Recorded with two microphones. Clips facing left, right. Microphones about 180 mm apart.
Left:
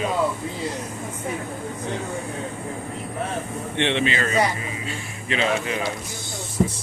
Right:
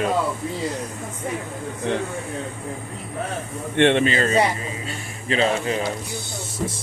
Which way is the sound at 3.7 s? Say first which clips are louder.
Right 6 dB; 50° right (ahead or behind).